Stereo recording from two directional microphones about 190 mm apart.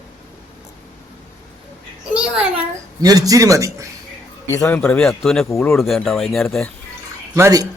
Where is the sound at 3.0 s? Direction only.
20° right (ahead or behind).